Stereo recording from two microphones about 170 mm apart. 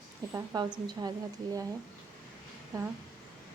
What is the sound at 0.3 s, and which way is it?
Speech, 25° right (ahead or behind).